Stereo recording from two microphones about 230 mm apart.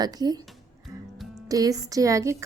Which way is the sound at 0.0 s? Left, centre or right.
Centre.